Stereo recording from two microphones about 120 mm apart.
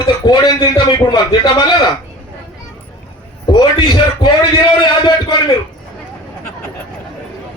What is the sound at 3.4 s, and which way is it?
Music, 35° left (ahead or behind).